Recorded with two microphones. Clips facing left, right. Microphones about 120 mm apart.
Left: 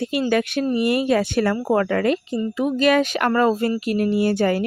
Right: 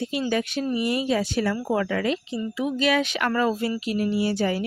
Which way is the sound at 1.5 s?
45° left (ahead or behind).